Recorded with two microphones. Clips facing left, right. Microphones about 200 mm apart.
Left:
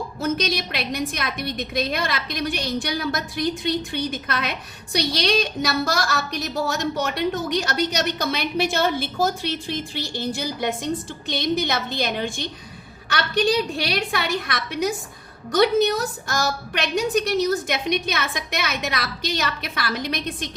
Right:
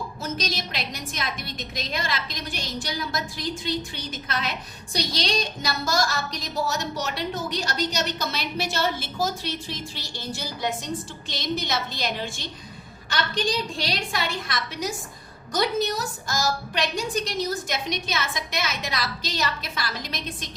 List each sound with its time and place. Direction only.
0.2 s a woman's voice: 60° left (ahead or behind)